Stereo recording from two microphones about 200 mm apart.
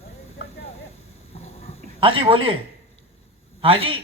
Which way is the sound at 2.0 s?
25° right (ahead or behind).